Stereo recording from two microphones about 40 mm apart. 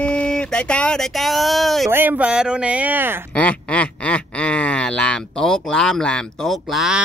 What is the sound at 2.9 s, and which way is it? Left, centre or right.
Speech, right.